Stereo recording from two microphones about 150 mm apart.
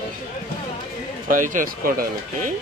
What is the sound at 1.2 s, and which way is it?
Speech, 60° right (ahead or behind).